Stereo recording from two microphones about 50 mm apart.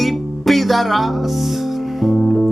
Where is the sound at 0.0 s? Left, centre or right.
Centre.